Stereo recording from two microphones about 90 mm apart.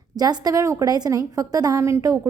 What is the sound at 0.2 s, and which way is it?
A woman's voice, 45° right (ahead or behind).